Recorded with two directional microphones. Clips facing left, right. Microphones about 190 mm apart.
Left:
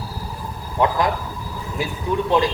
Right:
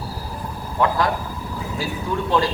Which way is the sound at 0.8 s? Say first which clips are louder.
Left 1 dB; 20° left (ahead or behind).